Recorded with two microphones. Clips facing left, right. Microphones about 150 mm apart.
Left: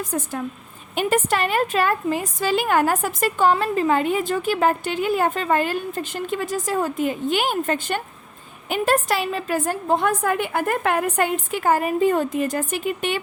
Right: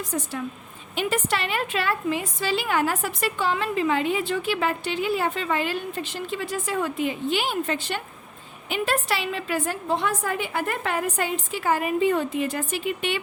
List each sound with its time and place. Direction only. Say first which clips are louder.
0.1 s a woman's voice: left 1 dB; 50° left (ahead or behind)